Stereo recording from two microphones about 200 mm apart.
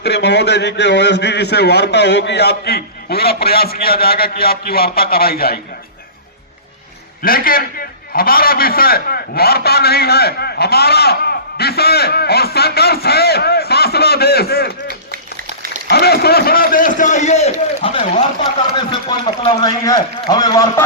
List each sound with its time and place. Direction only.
0.0 s a man's voice: 55° left (ahead or behind)
7.2 s a man's voice: 45° left (ahead or behind)
14.8 s clapping: 45° right (ahead or behind)
15.9 s a man's voice: 50° left (ahead or behind); by 20.8 s 20° left (ahead or behind)